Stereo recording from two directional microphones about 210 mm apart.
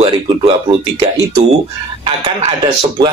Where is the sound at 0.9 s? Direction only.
15° right (ahead or behind).